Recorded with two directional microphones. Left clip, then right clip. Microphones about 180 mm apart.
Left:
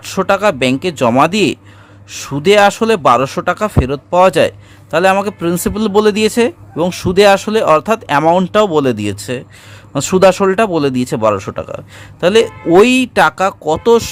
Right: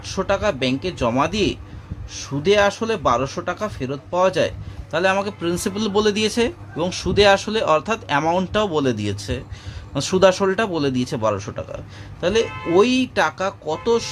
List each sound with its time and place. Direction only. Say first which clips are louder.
0.0 s speech: left 8 dB; 50° left (ahead or behind)